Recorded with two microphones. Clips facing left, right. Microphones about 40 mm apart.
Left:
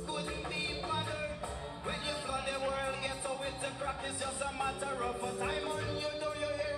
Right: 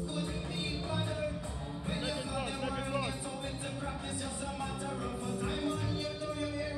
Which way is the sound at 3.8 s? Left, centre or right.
Left.